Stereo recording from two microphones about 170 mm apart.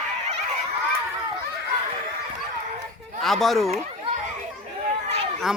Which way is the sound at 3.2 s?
Centre (ahead or behind).